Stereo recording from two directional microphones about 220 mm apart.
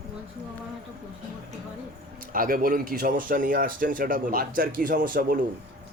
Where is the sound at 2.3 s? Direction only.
40° right (ahead or behind).